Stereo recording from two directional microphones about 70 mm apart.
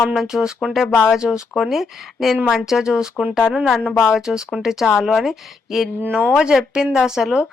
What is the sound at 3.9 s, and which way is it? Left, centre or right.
Speech, left.